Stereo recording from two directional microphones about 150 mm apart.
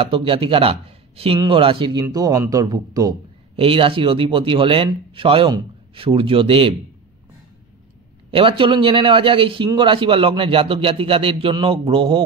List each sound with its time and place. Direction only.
0.0 s speech: 35° right (ahead or behind)
2.0 s speech: 20° right (ahead or behind)
3.5 s speech: 35° right (ahead or behind)
8.3 s speech: 35° right (ahead or behind)